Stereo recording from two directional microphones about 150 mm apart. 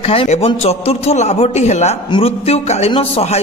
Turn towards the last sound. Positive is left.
turn(degrees=40)  # may be behind; listen again after turning